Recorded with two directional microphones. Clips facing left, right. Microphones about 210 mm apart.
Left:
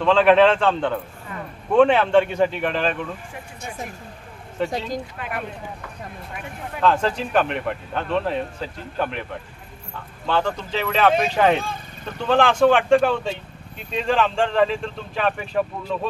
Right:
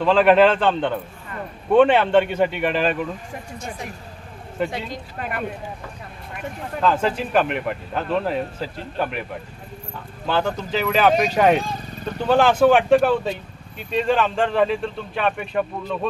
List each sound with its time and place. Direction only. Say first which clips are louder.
0.0 s speech: even; 5° right (ahead or behind)
4.6 s speech: left 3 dB; 45° left (ahead or behind)
6.8 s speech: even; 5° right (ahead or behind)
10.2 s speech: even; 5° right (ahead or behind)